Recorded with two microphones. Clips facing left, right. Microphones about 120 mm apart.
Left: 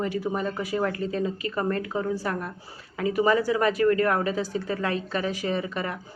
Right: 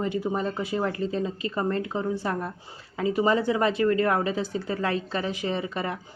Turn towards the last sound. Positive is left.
turn(degrees=-30)  # may be behind; listen again after turning